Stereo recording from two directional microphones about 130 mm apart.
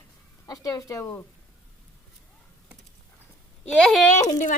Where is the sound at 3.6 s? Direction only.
5° left (ahead or behind).